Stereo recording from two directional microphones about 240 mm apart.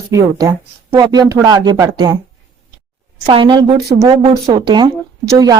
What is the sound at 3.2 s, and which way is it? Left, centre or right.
A woman's voice, centre.